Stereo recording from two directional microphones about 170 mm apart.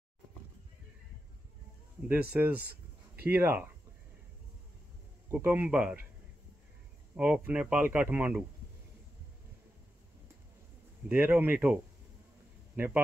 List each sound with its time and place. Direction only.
2.3 s a man's voice: 5° right (ahead or behind)
5.3 s a man's voice: 10° right (ahead or behind)
7.2 s a man's voice: 5° right (ahead or behind)
11.1 s a man's voice: 10° right (ahead or behind)